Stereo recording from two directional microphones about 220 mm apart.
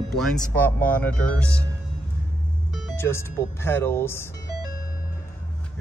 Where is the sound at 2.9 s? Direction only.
10° left (ahead or behind).